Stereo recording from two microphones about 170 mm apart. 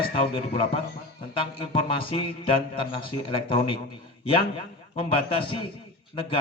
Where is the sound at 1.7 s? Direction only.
30° left (ahead or behind).